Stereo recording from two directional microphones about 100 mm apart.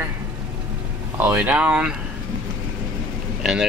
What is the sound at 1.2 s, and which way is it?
Speech, 20° right (ahead or behind).